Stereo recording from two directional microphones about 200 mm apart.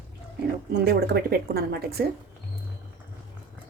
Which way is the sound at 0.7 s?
55° right (ahead or behind).